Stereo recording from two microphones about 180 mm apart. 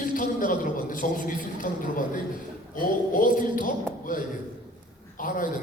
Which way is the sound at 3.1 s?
50° left (ahead or behind).